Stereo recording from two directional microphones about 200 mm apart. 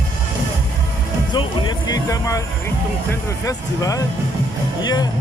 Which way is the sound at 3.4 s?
15° left (ahead or behind).